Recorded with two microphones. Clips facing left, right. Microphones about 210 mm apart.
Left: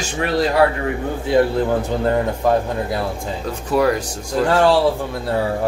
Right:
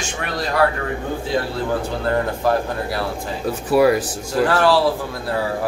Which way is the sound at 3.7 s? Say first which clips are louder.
Right 2 dB; 5° right (ahead or behind).